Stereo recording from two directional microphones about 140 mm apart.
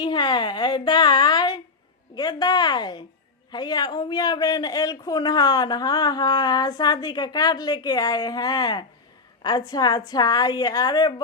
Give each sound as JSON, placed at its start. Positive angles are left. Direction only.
{"t": 0.0, "sound": "a woman's voice", "side_deg": 30}